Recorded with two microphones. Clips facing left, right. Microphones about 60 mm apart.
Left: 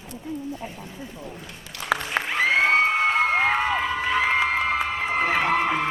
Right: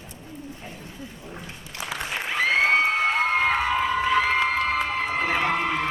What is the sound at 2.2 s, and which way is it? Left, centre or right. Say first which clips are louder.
Cheering: even; centre.